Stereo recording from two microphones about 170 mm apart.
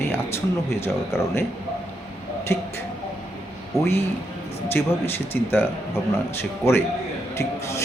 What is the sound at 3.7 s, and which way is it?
A man's voice, 15° left (ahead or behind).